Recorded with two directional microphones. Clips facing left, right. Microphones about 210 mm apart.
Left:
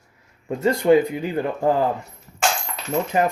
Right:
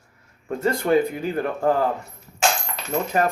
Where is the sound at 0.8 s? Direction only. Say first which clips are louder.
Left 4 dB; 20° left (ahead or behind).